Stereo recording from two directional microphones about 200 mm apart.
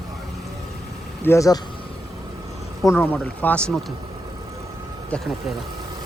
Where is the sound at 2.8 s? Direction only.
10° left (ahead or behind).